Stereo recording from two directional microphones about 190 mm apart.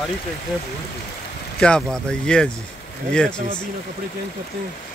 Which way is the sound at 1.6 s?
5° left (ahead or behind).